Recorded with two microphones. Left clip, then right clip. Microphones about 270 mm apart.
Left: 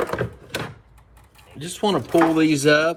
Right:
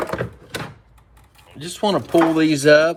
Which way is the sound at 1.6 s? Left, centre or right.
Centre.